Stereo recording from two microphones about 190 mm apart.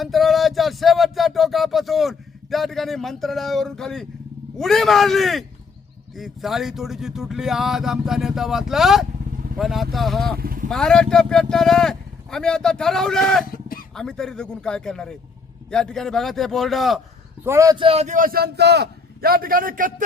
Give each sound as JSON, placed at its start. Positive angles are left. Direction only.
{"t": 0.0, "sound": "music", "side_deg": 0}
{"t": 4.5, "sound": "speech", "side_deg": 0}
{"t": 10.3, "sound": "vehicle", "side_deg": -50}
{"t": 10.7, "sound": "speech", "side_deg": 5}
{"t": 13.5, "sound": "a sound", "side_deg": 50}
{"t": 13.9, "sound": "speech", "side_deg": 5}
{"t": 17.4, "sound": "a man's voice", "side_deg": -15}